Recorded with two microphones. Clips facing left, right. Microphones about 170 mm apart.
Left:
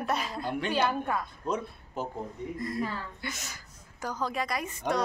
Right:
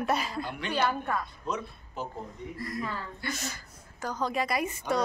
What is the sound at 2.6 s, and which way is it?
Speech, 25° left (ahead or behind).